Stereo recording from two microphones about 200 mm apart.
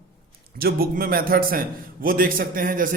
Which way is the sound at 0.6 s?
45° right (ahead or behind).